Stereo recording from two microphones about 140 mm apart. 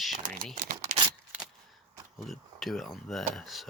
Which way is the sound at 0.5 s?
65° right (ahead or behind).